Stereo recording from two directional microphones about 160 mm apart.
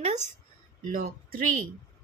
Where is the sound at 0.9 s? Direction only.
60° right (ahead or behind).